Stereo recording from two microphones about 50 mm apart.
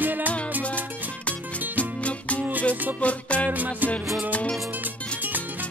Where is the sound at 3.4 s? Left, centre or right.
Right.